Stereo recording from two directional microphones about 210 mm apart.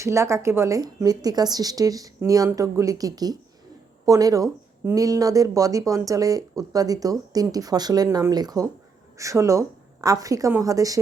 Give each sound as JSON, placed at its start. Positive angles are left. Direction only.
{"t": 0.0, "sound": "speech", "side_deg": -15}